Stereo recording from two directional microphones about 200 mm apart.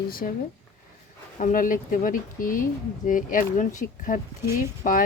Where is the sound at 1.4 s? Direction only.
40° left (ahead or behind).